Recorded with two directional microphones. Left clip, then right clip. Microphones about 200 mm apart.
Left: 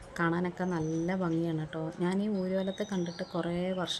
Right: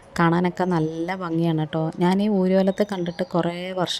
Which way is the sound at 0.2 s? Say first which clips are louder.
Right 11 dB; 35° right (ahead or behind).